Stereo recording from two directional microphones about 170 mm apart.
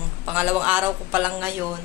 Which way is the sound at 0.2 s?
10° right (ahead or behind).